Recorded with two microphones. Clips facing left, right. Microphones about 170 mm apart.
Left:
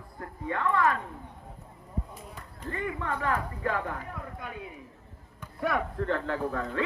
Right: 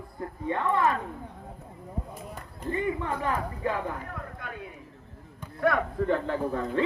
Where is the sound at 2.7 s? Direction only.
20° right (ahead or behind).